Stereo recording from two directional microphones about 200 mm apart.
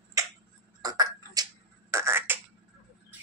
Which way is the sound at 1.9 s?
10° right (ahead or behind).